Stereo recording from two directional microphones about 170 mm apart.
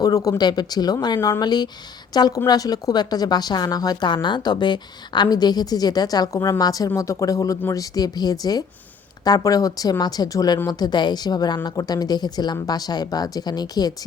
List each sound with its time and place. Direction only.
0.0 s speech: 20° left (ahead or behind)